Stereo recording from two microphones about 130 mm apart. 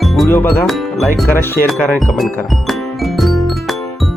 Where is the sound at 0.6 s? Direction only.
Centre (ahead or behind).